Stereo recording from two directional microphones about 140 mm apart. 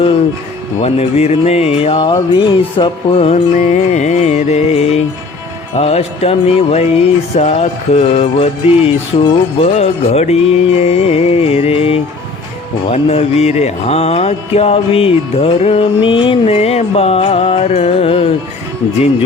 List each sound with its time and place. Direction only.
0.8 s mantra: 50° left (ahead or behind)
2.1 s music: 35° left (ahead or behind)
3.6 s mantra: 55° left (ahead or behind)